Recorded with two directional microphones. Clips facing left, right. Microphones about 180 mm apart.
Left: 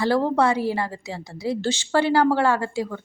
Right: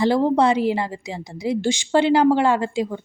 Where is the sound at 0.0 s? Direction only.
15° right (ahead or behind).